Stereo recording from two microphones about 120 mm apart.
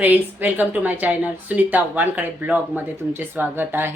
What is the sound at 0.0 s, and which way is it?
Speech, 15° right (ahead or behind).